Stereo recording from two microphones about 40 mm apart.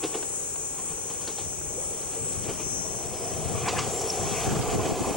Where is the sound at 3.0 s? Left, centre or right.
Centre.